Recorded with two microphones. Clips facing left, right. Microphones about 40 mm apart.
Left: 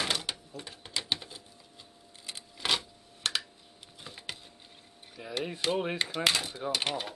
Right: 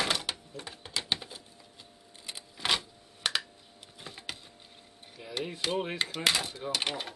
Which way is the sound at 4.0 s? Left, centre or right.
Centre.